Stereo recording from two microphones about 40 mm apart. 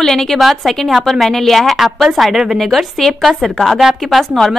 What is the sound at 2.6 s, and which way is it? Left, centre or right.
A woman's voice, centre.